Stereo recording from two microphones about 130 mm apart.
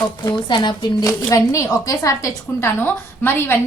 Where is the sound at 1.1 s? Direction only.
25° left (ahead or behind).